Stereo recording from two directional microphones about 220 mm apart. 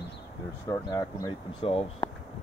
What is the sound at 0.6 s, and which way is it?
Speech, 15° left (ahead or behind).